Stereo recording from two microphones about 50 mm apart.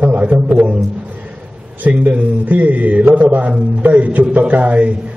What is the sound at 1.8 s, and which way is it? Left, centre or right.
A man's voice, right.